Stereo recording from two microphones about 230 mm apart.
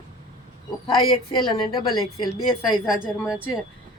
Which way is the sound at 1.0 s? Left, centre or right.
Centre.